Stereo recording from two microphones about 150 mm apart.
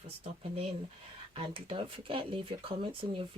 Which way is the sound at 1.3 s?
35° right (ahead or behind).